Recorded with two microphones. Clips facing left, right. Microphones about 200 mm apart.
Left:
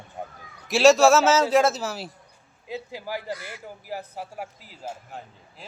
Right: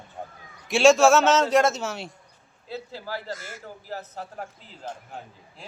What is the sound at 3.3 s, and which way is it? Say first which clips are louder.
Speech: left 2 dB; 45° right (ahead or behind).